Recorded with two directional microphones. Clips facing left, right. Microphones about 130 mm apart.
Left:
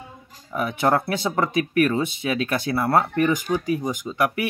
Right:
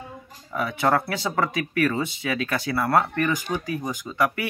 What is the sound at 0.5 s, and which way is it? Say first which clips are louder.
Speech: left 1 dB; 20° left (ahead or behind).